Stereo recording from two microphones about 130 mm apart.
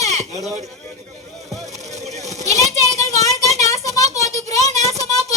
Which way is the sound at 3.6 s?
60° right (ahead or behind).